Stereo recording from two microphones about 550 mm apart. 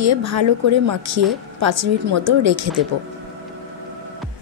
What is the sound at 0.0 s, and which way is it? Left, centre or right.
A woman's voice, right.